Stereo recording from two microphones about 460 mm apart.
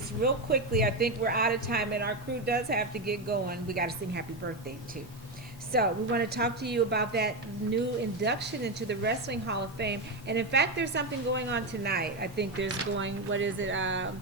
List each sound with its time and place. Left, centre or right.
0.2 s a woman's voice: centre
5.7 s a woman's voice: centre